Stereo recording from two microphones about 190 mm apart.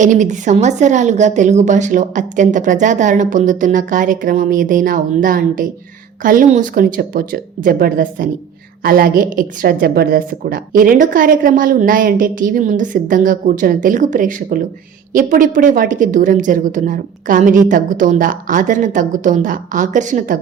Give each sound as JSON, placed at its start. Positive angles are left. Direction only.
{"t": 0.0, "sound": "a woman's voice", "side_deg": -40}